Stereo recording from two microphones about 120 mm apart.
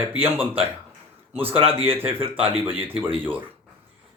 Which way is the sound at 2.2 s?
50° right (ahead or behind).